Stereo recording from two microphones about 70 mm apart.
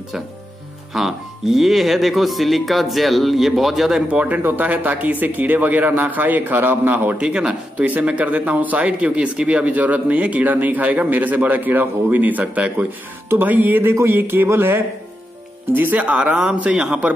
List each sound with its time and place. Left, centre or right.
0.9 s speech: centre
4.1 s speech: right
7.2 s a man's voice: centre